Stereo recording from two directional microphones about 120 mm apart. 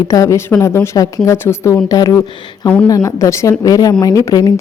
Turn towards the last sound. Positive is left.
turn(degrees=30)  # may be behind; listen again after turning